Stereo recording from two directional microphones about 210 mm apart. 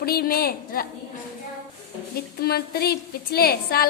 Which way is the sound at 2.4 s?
50° left (ahead or behind).